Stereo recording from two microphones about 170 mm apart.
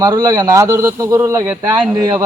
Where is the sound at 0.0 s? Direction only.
20° right (ahead or behind).